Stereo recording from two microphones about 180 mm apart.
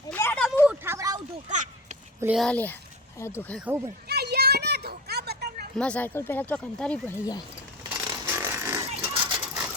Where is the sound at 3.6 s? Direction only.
10° right (ahead or behind).